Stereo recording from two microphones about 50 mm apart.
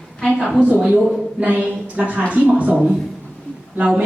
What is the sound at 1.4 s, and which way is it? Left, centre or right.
A woman's voice, right.